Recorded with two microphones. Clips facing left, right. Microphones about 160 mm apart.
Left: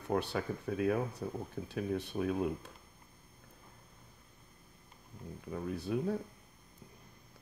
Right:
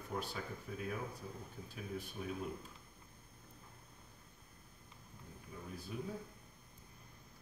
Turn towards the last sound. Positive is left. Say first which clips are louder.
# left 10 dB
turn(degrees=70)  # may be behind; listen again after turning